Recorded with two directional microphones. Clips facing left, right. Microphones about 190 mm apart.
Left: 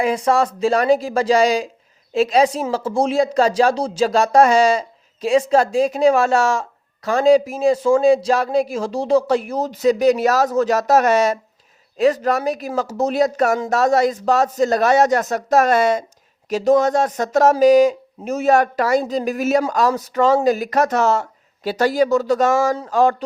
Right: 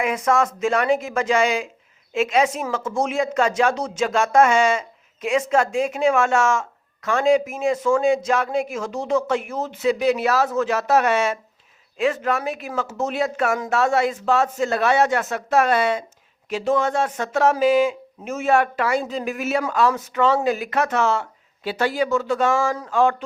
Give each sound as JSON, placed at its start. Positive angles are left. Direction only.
{"t": 0.0, "sound": "speech", "side_deg": 35}